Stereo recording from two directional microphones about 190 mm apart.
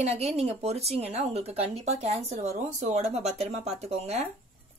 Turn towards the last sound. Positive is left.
turn(degrees=-35)  # may be behind; listen again after turning